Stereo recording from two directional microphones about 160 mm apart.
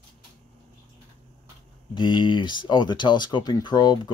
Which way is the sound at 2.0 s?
30° left (ahead or behind).